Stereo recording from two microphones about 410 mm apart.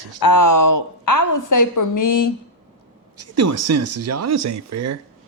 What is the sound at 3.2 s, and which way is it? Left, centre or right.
Speech, right.